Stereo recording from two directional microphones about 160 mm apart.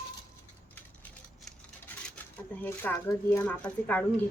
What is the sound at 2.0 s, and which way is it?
Speech, 10° left (ahead or behind).